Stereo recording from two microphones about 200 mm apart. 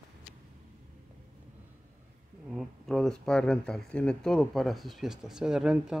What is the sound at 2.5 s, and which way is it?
Speech, centre (ahead or behind).